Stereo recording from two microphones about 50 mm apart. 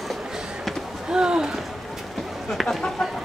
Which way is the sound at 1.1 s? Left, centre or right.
Centre.